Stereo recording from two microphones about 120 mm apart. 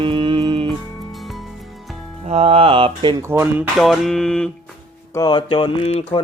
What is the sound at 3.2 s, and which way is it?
Speech, 20° right (ahead or behind).